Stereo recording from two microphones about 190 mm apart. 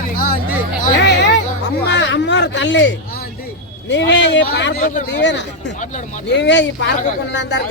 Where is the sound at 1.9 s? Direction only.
65° left (ahead or behind).